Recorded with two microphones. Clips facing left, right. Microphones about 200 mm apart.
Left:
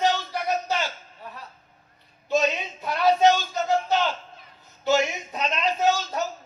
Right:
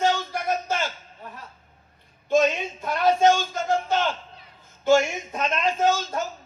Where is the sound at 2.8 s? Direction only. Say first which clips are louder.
Even; 50° right (ahead or behind).